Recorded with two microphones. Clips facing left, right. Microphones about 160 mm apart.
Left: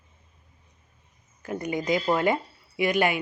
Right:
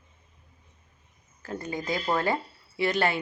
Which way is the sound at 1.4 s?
15° left (ahead or behind).